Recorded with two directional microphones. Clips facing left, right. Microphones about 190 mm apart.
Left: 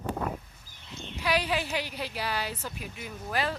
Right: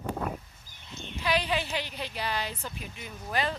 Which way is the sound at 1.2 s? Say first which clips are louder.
Even; 10° left (ahead or behind).